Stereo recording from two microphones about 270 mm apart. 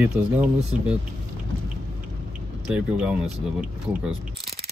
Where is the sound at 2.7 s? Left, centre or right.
Centre.